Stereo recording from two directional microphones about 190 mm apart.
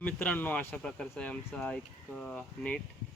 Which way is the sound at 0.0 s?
10° left (ahead or behind).